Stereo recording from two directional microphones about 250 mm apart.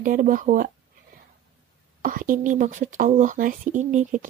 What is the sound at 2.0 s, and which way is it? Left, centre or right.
Speech, right.